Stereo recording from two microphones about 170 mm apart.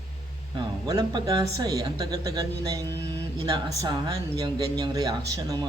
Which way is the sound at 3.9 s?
25° right (ahead or behind).